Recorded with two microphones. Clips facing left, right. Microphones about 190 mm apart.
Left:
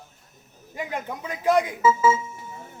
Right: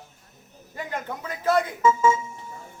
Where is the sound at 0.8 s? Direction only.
15° left (ahead or behind).